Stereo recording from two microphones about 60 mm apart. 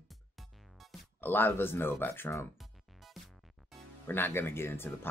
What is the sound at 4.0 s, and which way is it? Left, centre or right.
Speech, left.